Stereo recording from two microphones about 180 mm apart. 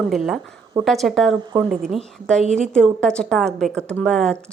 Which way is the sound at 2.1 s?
5° left (ahead or behind).